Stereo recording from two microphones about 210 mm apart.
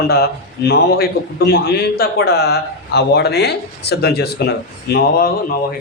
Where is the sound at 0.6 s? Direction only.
50° left (ahead or behind).